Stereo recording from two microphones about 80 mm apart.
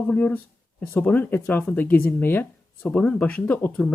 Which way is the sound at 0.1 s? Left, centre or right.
Centre.